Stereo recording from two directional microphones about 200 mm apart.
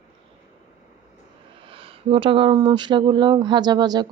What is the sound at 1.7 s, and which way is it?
Speech, 25° right (ahead or behind).